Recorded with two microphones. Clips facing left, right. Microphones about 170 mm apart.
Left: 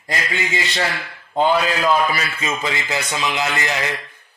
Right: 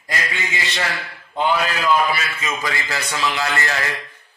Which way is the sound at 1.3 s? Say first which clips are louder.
Left 3 dB; 35° left (ahead or behind).